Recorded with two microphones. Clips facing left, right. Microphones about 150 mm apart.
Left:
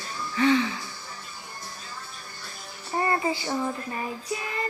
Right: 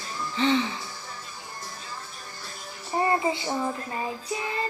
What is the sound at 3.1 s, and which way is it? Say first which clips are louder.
Child singing: even; 20° right (ahead or behind).